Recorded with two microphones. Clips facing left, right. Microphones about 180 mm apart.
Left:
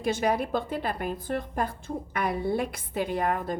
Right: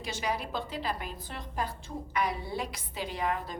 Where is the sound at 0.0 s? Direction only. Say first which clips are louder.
Left 8 dB; 55° left (ahead or behind).